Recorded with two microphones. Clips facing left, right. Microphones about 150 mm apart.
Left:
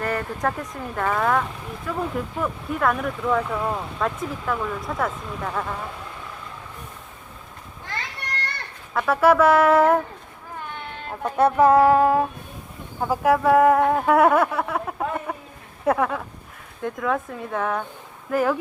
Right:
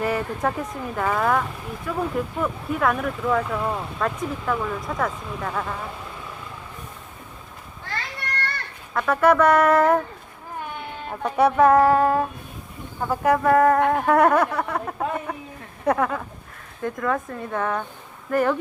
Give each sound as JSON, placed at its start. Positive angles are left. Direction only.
{"t": 0.0, "sound": "speech", "side_deg": -5}
{"t": 8.9, "sound": "speech", "side_deg": 5}
{"t": 11.1, "sound": "speech", "side_deg": 0}